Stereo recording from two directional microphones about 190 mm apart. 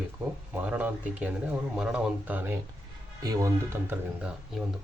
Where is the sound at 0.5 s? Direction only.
5° right (ahead or behind).